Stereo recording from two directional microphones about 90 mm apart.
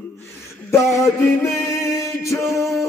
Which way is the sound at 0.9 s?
35° left (ahead or behind).